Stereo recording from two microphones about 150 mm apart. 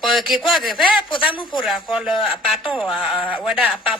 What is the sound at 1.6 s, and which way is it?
Speech, 5° right (ahead or behind).